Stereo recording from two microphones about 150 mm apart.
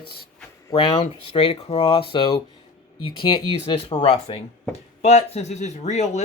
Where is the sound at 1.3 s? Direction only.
40° left (ahead or behind).